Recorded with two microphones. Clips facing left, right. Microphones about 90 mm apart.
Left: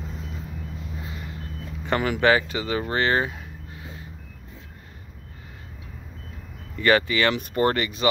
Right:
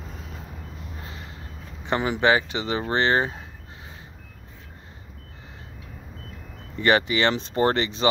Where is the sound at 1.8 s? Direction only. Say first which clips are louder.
Left 1 dB; 20° right (ahead or behind).